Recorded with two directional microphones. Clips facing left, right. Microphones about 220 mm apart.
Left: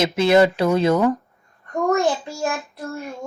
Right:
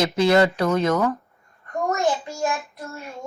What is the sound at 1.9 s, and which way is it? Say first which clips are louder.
Speech: left 4 dB; 30° left (ahead or behind).